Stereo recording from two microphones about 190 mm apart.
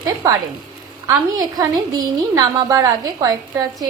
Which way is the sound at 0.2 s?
15° right (ahead or behind).